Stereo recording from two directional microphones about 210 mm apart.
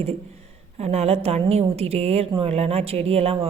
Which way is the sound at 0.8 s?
30° right (ahead or behind).